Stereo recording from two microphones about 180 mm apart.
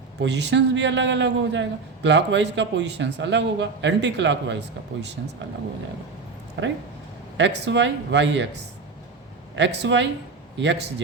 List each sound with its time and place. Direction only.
0.2 s a man's voice: 75° right (ahead or behind)
7.3 s a man's voice: 80° right
9.6 s speech: 80° right